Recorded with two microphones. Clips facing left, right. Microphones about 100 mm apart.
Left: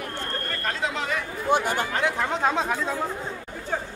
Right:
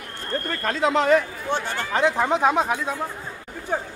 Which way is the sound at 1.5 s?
15° left (ahead or behind).